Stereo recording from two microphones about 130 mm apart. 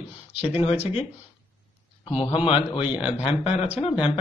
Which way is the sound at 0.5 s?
55° left (ahead or behind).